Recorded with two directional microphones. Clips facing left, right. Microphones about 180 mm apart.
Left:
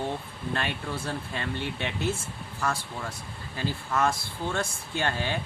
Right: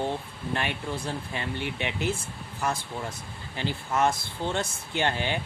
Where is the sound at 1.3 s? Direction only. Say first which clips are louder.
Even; 15° right (ahead or behind).